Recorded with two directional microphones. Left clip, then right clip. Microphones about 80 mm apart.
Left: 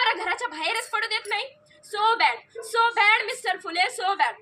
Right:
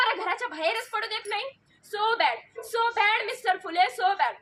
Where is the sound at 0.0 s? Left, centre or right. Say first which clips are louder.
Left 2 dB; right.